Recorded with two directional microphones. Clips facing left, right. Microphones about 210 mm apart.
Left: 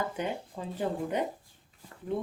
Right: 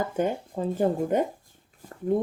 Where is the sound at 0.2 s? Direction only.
45° right (ahead or behind).